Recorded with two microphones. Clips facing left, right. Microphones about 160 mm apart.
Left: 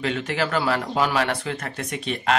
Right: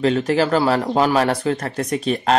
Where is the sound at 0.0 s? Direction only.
35° right (ahead or behind).